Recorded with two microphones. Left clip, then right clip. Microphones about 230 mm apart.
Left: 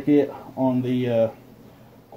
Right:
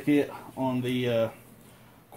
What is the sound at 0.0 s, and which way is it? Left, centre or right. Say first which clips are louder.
Speech: left 6 dB; right.